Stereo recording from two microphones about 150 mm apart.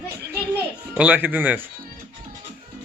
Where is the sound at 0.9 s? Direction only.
10° right (ahead or behind).